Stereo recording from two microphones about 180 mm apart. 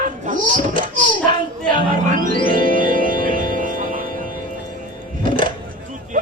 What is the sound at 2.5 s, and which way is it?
Music, 50° right (ahead or behind).